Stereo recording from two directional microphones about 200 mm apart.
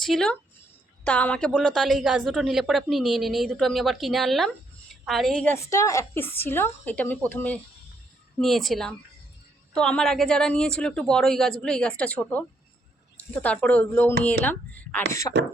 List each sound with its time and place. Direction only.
0.0 s a woman's voice: 5° left (ahead or behind)
5.6 s a woman's voice: 15° left (ahead or behind)
15.3 s speech: 20° left (ahead or behind)